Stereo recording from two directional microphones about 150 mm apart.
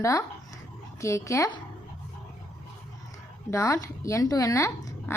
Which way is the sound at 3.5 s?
20° left (ahead or behind).